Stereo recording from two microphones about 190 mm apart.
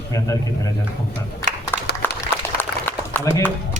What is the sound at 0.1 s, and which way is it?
Speech, 15° left (ahead or behind).